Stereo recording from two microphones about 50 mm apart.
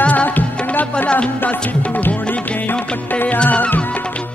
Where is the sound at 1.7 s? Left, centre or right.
Left.